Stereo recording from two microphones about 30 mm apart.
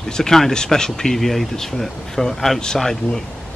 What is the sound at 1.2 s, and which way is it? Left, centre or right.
Speech, centre.